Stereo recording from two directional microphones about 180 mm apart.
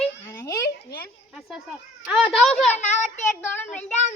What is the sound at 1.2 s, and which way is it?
A child's voice, centre (ahead or behind).